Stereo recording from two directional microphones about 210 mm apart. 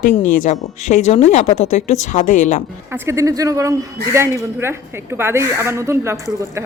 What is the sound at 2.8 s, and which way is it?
A man's voice, 10° right (ahead or behind).